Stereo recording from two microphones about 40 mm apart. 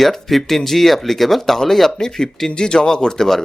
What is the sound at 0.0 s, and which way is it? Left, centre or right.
Speech, centre.